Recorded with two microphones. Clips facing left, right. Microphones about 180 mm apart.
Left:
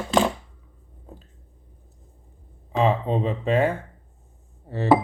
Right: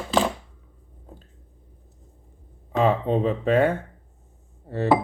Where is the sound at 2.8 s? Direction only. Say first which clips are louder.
Right 1 dB; 50° right (ahead or behind).